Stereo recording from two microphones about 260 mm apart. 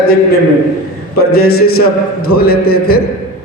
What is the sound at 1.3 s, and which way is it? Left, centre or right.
A man's voice, left.